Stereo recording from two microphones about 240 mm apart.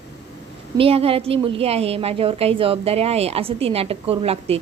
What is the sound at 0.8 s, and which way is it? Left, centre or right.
A woman's voice, right.